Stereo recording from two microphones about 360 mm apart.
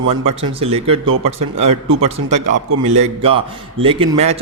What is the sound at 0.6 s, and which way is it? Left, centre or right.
A man's voice, centre.